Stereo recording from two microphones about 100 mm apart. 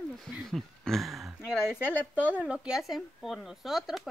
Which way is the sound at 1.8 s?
15° left (ahead or behind).